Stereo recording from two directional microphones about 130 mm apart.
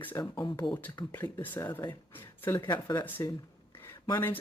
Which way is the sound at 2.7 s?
35° left (ahead or behind).